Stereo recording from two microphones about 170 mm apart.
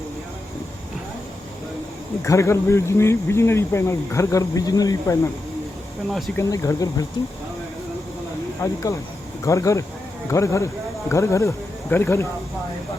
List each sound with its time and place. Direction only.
2.2 s speech: 15° left (ahead or behind)
6.3 s speech: 20° left (ahead or behind)
8.6 s speech: 20° left (ahead or behind)